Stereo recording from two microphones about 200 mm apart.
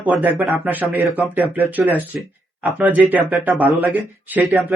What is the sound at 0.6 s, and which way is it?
Speech, 5° right (ahead or behind).